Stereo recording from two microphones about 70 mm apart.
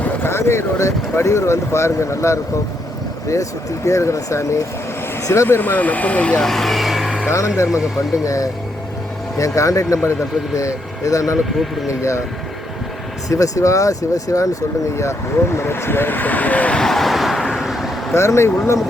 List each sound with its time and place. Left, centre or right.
0.3 s speech: left
3.8 s speech: left; by 6.5 s centre
6.5 s vehicle: centre
7.3 s speech: left
13.2 s speech: left
14.9 s speech: left; by 16.8 s centre
16.8 s vehicle: centre
17.5 s a sound: centre
18.1 s speech: left